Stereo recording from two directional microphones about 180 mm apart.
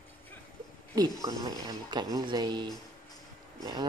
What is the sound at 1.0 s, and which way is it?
Speech, 20° right (ahead or behind).